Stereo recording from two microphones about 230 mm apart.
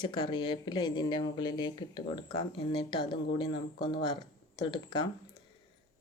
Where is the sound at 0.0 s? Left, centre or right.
Left.